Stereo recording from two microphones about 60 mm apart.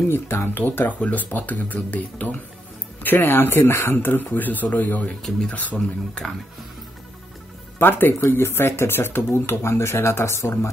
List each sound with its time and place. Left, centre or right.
0.1 s speech: left
7.8 s speech: left